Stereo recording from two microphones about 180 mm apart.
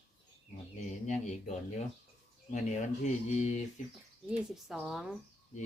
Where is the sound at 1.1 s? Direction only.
40° left (ahead or behind).